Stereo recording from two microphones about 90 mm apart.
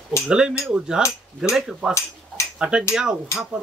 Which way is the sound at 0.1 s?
35° left (ahead or behind).